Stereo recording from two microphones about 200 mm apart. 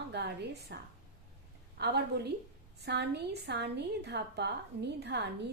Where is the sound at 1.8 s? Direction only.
55° right (ahead or behind).